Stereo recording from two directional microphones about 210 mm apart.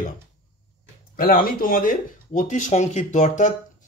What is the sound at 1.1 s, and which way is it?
Speech, 45° left (ahead or behind).